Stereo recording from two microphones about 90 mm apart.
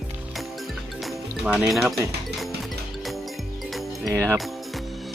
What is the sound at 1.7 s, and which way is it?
Speech, centre (ahead or behind).